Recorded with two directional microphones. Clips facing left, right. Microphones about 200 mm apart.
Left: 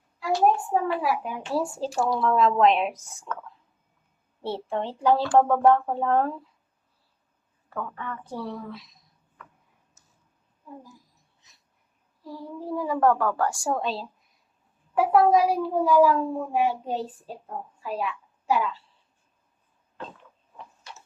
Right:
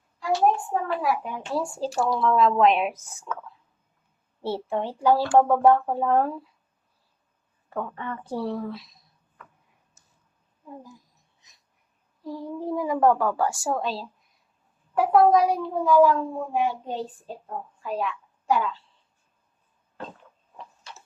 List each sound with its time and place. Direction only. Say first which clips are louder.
0.7 s speech: left 1 dB; 5° left (ahead or behind)
4.4 s speech: right 2 dB; 5° right (ahead or behind)
7.7 s speech: right 2 dB; 25° right (ahead or behind)
12.2 s speech: right 4 dB; 20° right (ahead or behind); by 18.8 s 5° left (ahead or behind)